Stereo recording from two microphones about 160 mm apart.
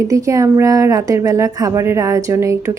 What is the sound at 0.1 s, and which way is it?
Speech, 20° right (ahead or behind).